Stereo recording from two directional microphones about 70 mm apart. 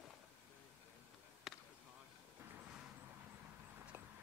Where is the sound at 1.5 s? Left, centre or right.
Centre.